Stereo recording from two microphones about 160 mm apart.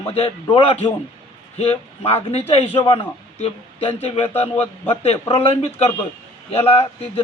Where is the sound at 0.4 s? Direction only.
30° left (ahead or behind).